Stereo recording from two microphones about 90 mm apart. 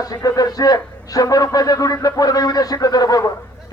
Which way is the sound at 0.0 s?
45° left (ahead or behind).